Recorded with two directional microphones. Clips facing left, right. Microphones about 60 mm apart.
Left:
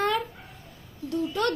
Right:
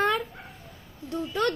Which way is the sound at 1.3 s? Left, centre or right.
Right.